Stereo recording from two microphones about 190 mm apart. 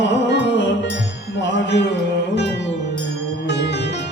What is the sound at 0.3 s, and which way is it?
Music, 70° left (ahead or behind).